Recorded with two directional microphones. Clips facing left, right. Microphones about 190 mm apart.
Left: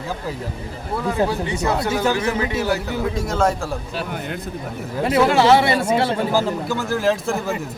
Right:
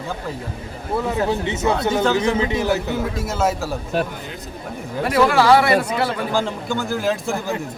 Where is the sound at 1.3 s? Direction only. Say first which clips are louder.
Right 2 dB; 20° right (ahead or behind).